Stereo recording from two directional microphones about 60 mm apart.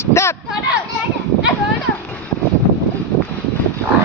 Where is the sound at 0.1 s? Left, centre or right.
Left.